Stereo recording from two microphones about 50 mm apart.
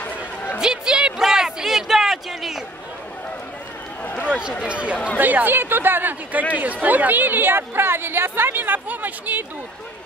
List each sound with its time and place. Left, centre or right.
0.0 s chatter: left
0.6 s a sound: centre
4.0 s run: left
4.3 s speech: centre
4.9 s speech: left
5.2 s speech: right
6.6 s a woman's voice: right